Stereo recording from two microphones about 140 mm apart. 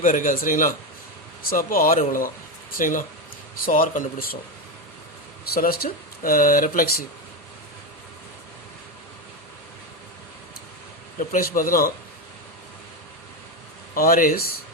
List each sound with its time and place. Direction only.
0.0 s a man's voice: 70° left (ahead or behind)
1.4 s a man's voice: 90° left
5.5 s speech: 90° left
11.2 s speech: 80° left
13.9 s speech: 90° left